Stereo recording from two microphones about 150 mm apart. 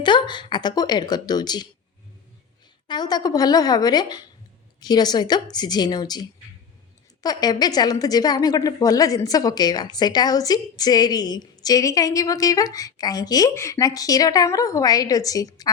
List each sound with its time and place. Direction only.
0.0 s a woman's voice: 30° left (ahead or behind)
2.8 s a woman's voice: 30° left (ahead or behind)